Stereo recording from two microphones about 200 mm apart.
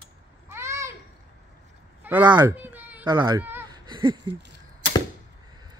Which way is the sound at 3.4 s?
10° right (ahead or behind).